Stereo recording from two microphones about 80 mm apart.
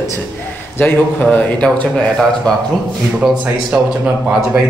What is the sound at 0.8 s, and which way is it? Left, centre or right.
Speech, left.